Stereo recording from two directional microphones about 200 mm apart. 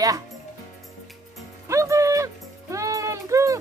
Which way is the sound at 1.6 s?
15° right (ahead or behind).